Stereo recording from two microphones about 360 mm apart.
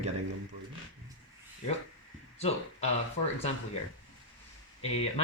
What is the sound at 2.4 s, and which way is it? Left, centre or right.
Speech, centre.